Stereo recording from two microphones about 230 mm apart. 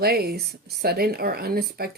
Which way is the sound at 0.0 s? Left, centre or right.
Right.